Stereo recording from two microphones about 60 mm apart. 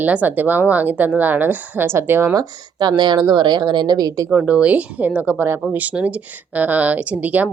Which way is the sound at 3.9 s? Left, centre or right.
Right.